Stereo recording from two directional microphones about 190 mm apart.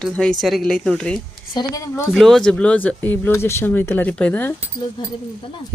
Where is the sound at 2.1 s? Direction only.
Centre (ahead or behind).